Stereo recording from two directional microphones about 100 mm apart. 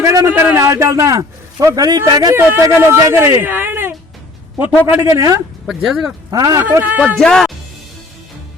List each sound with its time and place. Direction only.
0.0 s speech: 30° right (ahead or behind)
2.3 s a man's voice: 25° right (ahead or behind)
5.1 s speech: 35° right (ahead or behind)
5.6 s speech: 5° right (ahead or behind)
6.3 s speech: 35° right (ahead or behind)
6.6 s speech: 20° right (ahead or behind)
7.2 s speech: 5° left (ahead or behind)